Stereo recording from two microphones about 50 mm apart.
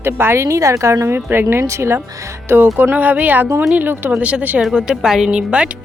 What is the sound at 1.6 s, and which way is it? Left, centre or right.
Speech, right.